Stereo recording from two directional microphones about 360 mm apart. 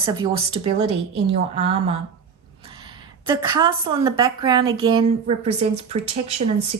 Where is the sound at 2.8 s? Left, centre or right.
Centre.